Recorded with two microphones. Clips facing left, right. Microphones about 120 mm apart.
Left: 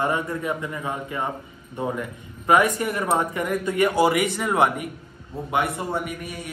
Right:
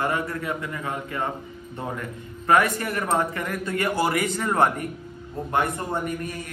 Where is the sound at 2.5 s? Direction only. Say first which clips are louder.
Left 1 dB; 15° left (ahead or behind).